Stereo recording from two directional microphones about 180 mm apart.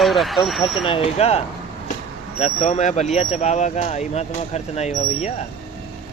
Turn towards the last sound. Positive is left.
turn(degrees=40)  # may be behind; listen again after turning